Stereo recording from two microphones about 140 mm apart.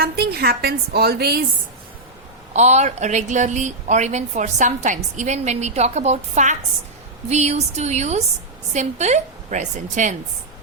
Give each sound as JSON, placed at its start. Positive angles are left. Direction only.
{"t": 0.0, "sound": "a woman's voice", "side_deg": -90}
{"t": 2.5, "sound": "a woman's voice", "side_deg": -55}